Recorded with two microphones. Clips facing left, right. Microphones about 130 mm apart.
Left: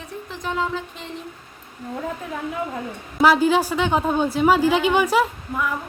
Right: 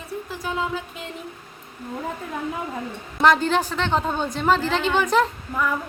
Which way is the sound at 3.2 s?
5° left (ahead or behind).